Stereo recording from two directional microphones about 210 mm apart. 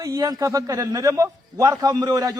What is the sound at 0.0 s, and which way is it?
A man's voice, 15° right (ahead or behind).